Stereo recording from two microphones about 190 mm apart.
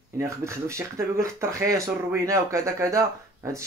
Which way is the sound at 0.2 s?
15° right (ahead or behind).